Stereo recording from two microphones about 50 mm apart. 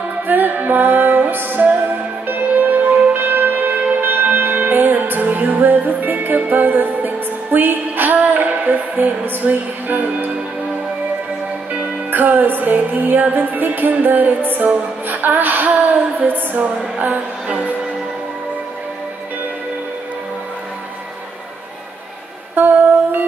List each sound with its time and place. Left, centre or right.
0.3 s music: right
11.7 s music: right
22.6 s music: right